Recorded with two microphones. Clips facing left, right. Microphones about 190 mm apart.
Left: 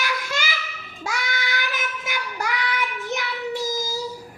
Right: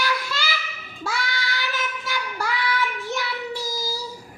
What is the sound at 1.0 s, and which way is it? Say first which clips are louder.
Child singing: even; 20° left (ahead or behind).